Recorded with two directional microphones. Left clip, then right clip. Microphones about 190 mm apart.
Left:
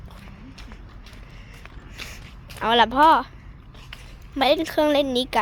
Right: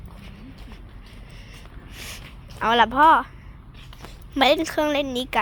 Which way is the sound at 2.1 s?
15° left (ahead or behind).